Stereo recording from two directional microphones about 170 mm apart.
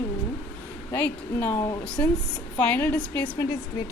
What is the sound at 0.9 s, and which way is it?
Speech, 15° left (ahead or behind).